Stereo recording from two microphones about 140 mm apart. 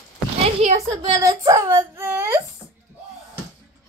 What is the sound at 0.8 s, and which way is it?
Speech, 25° right (ahead or behind).